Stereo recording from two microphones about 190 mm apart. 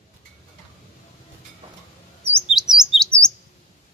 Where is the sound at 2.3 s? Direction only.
Centre (ahead or behind).